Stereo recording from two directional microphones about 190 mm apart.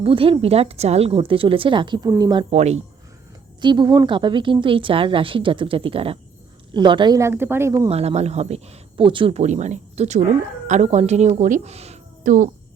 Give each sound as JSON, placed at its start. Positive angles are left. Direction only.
{"t": 0.0, "sound": "speech", "side_deg": -30}
{"t": 2.5, "sound": "speech", "side_deg": -35}
{"t": 3.6, "sound": "a woman's voice", "side_deg": -25}
{"t": 7.9, "sound": "speech", "side_deg": -35}